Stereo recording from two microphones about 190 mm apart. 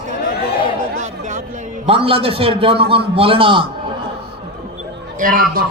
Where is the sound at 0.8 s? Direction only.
40° right (ahead or behind).